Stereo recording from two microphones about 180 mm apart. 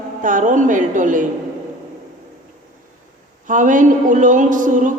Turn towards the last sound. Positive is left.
turn(degrees=-45)  # may be behind; listen again after turning